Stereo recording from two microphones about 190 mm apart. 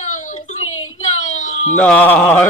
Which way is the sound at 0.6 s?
90° left.